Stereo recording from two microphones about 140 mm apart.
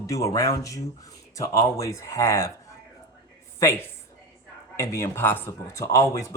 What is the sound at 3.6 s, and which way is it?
A woman's voice, 20° left (ahead or behind).